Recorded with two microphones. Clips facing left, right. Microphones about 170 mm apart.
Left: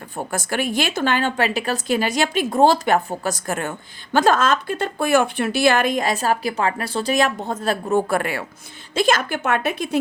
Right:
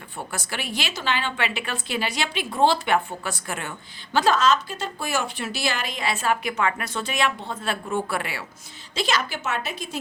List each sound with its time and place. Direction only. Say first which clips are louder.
0.2 s a woman's voice: left 8 dB; 45° left (ahead or behind)